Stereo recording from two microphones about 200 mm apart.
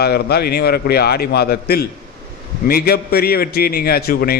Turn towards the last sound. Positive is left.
turn(degrees=50)  # may be behind; listen again after turning